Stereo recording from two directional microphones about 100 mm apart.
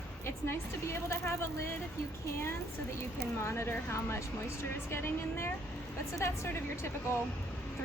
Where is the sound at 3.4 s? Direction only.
25° left (ahead or behind).